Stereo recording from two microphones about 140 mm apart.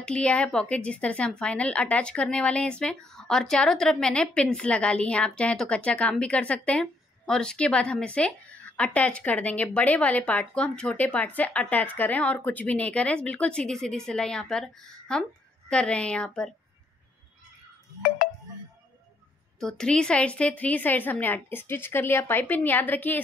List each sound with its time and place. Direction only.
0.0 s a woman's voice: 5° left (ahead or behind)
18.2 s music: 90° left
19.6 s a woman's voice: 5° left (ahead or behind)